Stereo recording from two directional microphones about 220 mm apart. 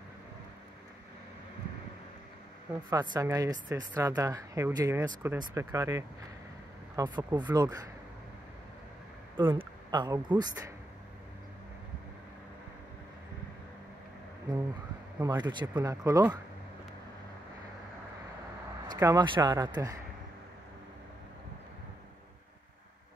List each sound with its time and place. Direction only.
2.7 s speech: 15° right (ahead or behind)
9.4 s speech: 20° right (ahead or behind)
15.1 s speech: 15° right (ahead or behind)
18.9 s speech: 15° right (ahead or behind)